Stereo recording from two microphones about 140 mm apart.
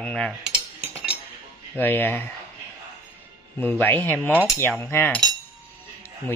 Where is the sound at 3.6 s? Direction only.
15° left (ahead or behind).